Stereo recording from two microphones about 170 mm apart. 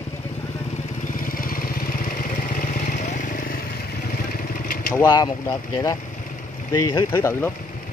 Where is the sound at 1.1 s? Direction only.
55° left (ahead or behind).